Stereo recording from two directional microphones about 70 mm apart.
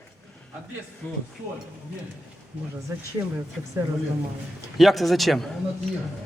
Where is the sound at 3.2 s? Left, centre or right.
Right.